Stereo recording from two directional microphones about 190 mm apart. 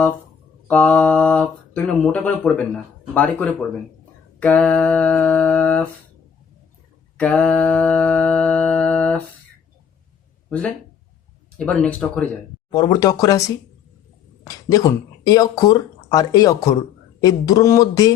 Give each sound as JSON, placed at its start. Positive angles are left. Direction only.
{"t": 0.7, "sound": "speech", "side_deg": 5}
{"t": 7.2, "sound": "music", "side_deg": 5}
{"t": 10.5, "sound": "speech", "side_deg": 5}
{"t": 12.7, "sound": "a sound", "side_deg": 20}
{"t": 14.4, "sound": "speech", "side_deg": 20}
{"t": 17.2, "sound": "a sound", "side_deg": 20}